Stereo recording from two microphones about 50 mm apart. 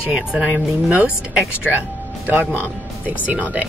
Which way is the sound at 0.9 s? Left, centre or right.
Right.